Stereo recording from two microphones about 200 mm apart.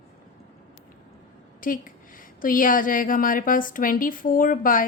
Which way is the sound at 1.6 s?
45° left (ahead or behind).